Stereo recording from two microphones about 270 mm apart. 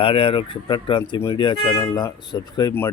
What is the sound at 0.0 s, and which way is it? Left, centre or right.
Speech, centre.